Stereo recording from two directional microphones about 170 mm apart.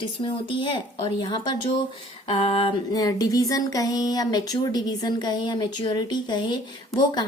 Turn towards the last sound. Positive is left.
turn(degrees=25)  # may be behind; listen again after turning